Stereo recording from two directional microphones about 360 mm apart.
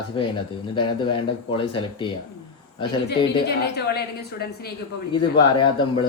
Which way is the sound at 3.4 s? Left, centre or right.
Left.